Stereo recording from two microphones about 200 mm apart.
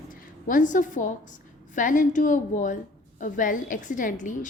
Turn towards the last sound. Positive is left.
turn(degrees=40)  # may be behind; listen again after turning